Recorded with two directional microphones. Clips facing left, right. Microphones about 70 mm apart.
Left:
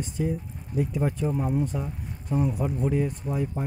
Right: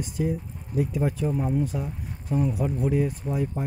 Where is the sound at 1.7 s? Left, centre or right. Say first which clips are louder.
Right 1 dB; centre.